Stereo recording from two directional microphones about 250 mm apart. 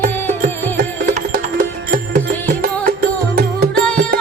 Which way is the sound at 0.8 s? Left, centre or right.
Right.